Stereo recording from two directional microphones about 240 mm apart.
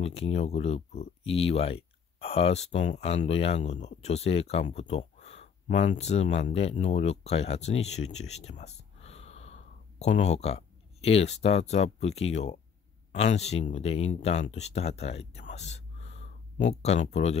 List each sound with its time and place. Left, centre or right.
0.0 s speech: left